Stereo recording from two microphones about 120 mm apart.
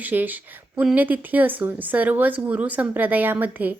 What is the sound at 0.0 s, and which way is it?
A woman's voice, 15° right (ahead or behind).